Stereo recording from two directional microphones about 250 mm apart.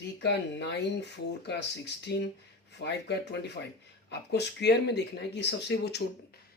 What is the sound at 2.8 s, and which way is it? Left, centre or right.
Speech, left.